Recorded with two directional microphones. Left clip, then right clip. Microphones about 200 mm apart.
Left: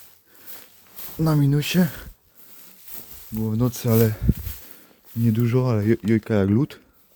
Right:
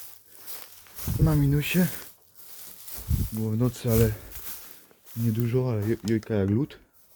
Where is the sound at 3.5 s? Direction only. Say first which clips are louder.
Left 4 dB; 40° left (ahead or behind).